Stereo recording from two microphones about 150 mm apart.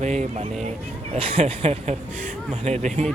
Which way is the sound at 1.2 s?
40° right (ahead or behind).